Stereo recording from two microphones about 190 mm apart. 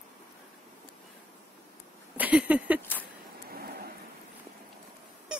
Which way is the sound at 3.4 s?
55° right (ahead or behind).